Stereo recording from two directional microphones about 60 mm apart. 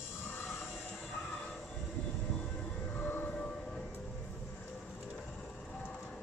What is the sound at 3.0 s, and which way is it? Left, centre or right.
Train, left.